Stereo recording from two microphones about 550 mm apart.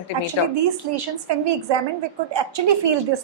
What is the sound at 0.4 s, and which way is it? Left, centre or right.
Speech, left.